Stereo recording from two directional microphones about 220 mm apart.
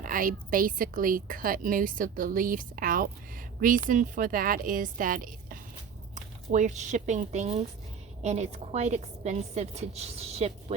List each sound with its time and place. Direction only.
0.0 s a woman's voice: 40° right (ahead or behind)